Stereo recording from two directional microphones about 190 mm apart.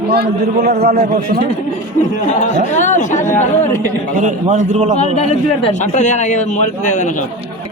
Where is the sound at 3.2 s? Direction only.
15° left (ahead or behind).